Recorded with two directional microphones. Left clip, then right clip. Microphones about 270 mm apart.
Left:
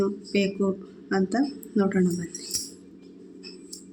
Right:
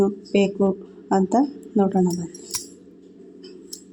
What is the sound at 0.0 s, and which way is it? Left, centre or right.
Speech, centre.